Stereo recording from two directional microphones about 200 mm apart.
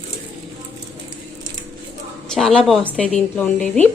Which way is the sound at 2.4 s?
Centre (ahead or behind).